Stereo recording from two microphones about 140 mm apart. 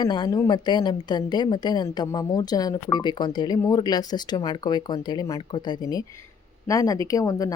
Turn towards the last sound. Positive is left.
turn(degrees=25)  # may be behind; listen again after turning